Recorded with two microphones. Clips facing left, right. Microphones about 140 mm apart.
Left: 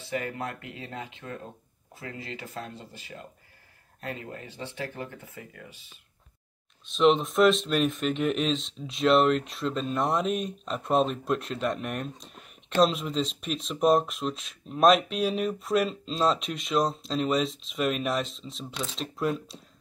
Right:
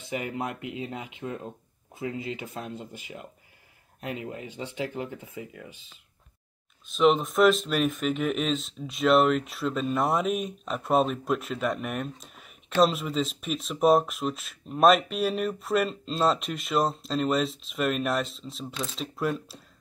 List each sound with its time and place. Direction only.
0.0 s speech: 15° right (ahead or behind)
6.9 s speech: centre (ahead or behind)